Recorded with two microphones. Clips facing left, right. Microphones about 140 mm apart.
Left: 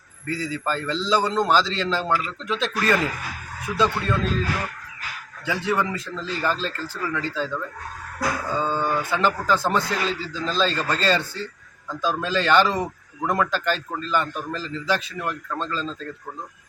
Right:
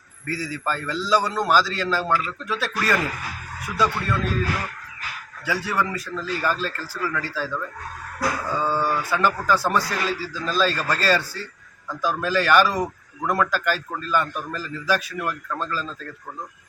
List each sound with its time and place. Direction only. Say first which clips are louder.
0.3 s a man's voice: left 1 dB; 25° left (ahead or behind)
5.5 s a man's voice: left 1 dB; 25° left (ahead or behind)